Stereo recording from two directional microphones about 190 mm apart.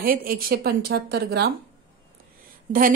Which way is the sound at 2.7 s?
40° right (ahead or behind).